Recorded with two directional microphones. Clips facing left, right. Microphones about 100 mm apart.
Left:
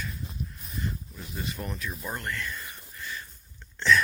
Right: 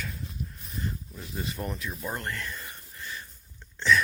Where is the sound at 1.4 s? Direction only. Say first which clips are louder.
Right 1 dB; 25° right (ahead or behind).